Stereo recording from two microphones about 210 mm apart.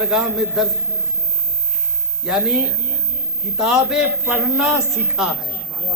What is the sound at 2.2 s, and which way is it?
A man's voice, 5° right (ahead or behind).